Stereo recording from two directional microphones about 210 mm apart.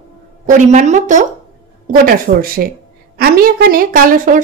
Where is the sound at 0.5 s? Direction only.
35° right (ahead or behind).